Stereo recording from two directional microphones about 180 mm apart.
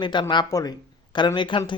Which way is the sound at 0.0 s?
25° left (ahead or behind).